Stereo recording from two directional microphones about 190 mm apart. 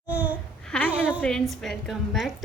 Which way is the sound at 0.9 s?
5° right (ahead or behind).